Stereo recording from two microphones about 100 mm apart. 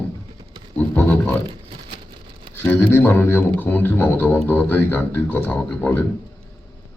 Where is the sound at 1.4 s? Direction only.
60° right (ahead or behind).